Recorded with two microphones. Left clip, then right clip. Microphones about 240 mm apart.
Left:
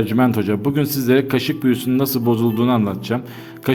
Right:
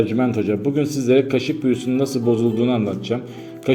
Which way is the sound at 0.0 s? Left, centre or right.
Left.